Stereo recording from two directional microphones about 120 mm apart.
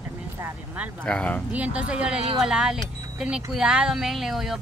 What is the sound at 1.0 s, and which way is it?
Speech, 10° left (ahead or behind).